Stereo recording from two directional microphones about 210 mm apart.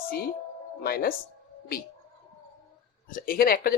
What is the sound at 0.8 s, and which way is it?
Speech, 45° left (ahead or behind).